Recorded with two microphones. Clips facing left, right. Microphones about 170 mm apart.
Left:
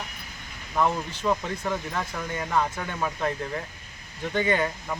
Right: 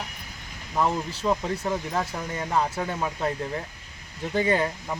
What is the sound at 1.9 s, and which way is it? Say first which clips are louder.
Speech: right 2 dB; 25° right (ahead or behind).